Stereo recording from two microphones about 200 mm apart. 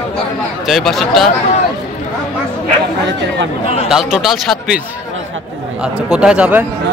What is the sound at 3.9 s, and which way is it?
Speech, centre (ahead or behind).